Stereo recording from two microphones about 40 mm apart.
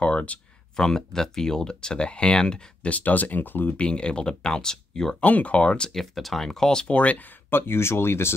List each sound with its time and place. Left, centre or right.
0.0 s a sound: left
0.7 s speech: centre
2.9 s speech: left
3.7 s speech: left
5.2 s speech: left
5.9 s speech: centre
6.9 s speech: left
7.4 s speech: left